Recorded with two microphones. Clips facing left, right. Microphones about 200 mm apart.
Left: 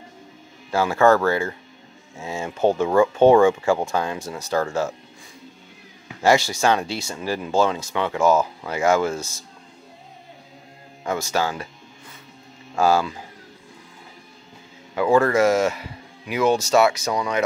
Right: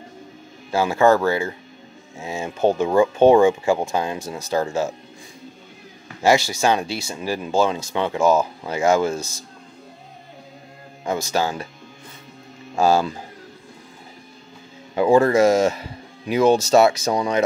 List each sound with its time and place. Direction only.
0.7 s speech: 15° right (ahead or behind)
6.6 s speech: 15° right (ahead or behind)
11.1 s speech: 15° right (ahead or behind)
12.7 s speech: 20° right (ahead or behind)
15.0 s speech: 25° right (ahead or behind)
15.3 s speech: 15° right (ahead or behind)
15.6 s speech: 35° right (ahead or behind)
16.7 s speech: 35° right (ahead or behind)